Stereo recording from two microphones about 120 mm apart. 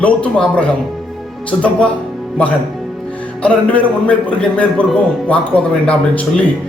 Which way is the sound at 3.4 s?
10° left (ahead or behind).